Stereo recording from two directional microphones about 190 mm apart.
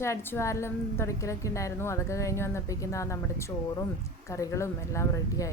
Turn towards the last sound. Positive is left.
turn(degrees=15)  # may be behind; listen again after turning